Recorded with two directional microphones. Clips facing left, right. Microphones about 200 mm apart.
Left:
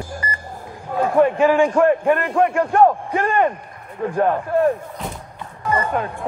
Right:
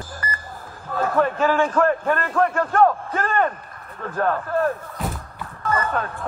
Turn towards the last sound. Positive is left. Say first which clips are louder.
# left 2 dB
turn(degrees=15)  # may be behind; listen again after turning